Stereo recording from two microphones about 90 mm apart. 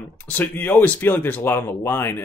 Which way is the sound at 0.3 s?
20° left (ahead or behind).